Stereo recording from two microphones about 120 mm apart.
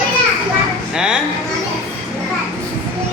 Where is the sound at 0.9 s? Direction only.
5° right (ahead or behind).